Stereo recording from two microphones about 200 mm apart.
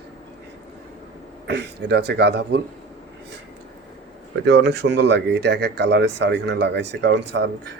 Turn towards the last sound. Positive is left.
turn(degrees=-60)  # may be behind; listen again after turning